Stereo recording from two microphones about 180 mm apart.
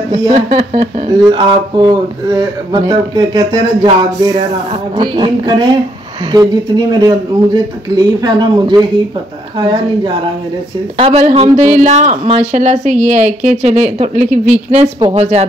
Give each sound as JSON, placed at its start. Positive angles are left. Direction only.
{"t": 0.1, "sound": "speech", "side_deg": -35}
{"t": 15.0, "sound": "speech", "side_deg": -25}